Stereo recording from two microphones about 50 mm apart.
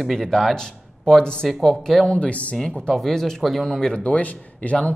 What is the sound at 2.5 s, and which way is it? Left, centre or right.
Speech, centre.